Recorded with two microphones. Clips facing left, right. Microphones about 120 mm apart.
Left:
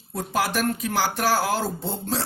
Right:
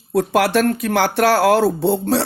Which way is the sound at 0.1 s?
70° right (ahead or behind).